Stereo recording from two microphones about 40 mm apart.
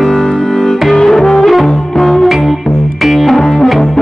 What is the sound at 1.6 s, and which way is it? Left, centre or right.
Music, centre.